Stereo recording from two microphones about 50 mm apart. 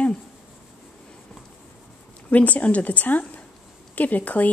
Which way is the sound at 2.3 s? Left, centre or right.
Left.